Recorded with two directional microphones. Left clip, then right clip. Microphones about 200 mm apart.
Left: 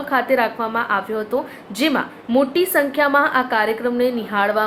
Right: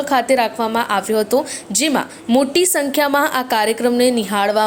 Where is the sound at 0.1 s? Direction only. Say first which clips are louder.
Right 1 dB; 40° right (ahead or behind).